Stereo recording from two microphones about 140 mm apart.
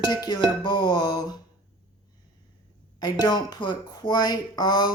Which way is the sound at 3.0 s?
30° left (ahead or behind).